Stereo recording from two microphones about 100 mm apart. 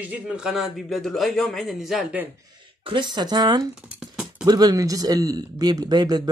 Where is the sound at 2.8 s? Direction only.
55° right (ahead or behind).